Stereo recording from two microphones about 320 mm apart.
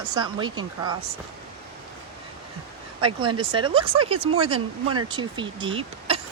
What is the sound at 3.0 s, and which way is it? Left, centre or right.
Speech, centre.